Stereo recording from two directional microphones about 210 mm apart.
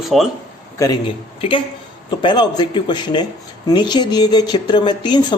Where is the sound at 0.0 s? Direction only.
Centre (ahead or behind).